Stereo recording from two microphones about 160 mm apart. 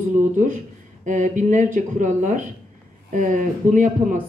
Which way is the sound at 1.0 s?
55° right (ahead or behind).